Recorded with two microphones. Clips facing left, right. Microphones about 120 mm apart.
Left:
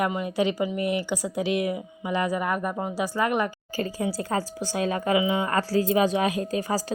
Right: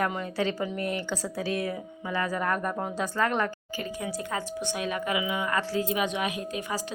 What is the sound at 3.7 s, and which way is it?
A woman's voice, 35° left (ahead or behind).